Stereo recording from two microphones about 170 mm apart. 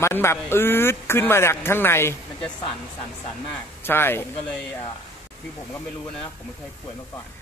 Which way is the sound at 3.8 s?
15° left (ahead or behind).